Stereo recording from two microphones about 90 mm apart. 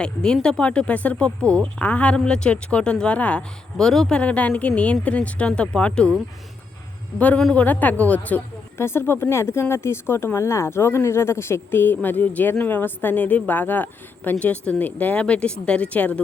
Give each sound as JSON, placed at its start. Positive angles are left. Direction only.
{"t": 0.0, "sound": "speech", "side_deg": 10}
{"t": 3.8, "sound": "speech", "side_deg": 5}
{"t": 7.2, "sound": "speech", "side_deg": 15}
{"t": 8.8, "sound": "speech", "side_deg": 25}